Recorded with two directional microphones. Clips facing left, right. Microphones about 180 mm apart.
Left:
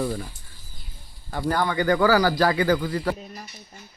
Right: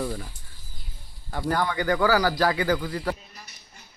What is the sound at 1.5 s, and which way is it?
Speech, 15° right (ahead or behind).